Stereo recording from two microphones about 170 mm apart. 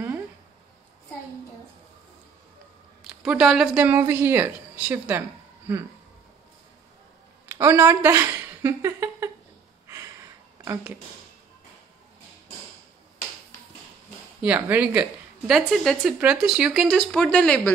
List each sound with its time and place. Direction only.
3.2 s a woman's voice: 5° right (ahead or behind)
7.4 s a woman's voice: 15° right (ahead or behind)
10.6 s speech: 15° right (ahead or behind)
14.4 s a woman's voice: 10° right (ahead or behind); by 17.7 s 5° left (ahead or behind)